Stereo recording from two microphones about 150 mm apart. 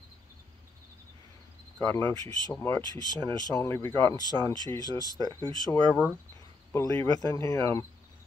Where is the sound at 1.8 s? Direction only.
10° left (ahead or behind).